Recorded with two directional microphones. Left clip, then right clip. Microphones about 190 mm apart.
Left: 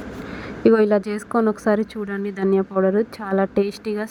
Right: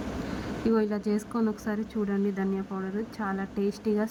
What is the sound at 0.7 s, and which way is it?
Speech, 15° left (ahead or behind).